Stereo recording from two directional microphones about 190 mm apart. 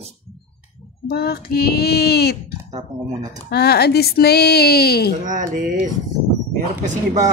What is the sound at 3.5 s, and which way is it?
Speech, 60° left (ahead or behind).